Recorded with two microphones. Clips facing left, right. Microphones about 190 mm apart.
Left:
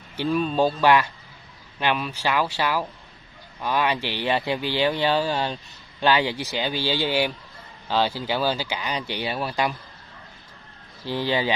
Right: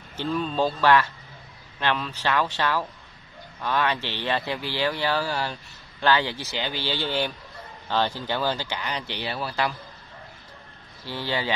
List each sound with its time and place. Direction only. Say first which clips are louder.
0.2 s speech: left 3 dB; 15° left (ahead or behind)
11.1 s speech: left 4 dB; 15° left (ahead or behind)